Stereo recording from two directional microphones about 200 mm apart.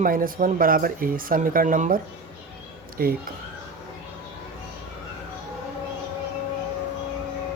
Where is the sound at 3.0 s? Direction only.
45° right (ahead or behind).